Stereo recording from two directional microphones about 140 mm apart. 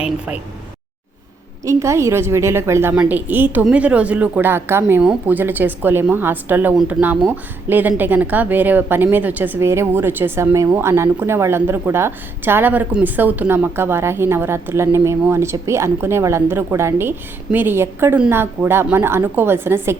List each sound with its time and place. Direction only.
1.6 s a woman's voice: 20° right (ahead or behind)